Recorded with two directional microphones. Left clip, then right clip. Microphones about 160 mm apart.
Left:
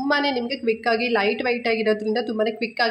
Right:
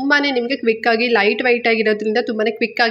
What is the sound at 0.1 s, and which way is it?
A woman's voice, 20° right (ahead or behind).